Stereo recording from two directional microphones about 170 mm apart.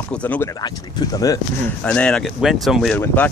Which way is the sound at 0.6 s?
25° left (ahead or behind).